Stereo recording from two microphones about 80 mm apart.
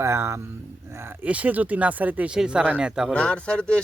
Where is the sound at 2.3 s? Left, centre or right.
Centre.